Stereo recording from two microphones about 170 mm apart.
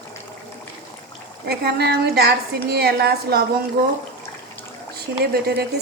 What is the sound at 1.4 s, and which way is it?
A woman's voice, 70° right (ahead or behind).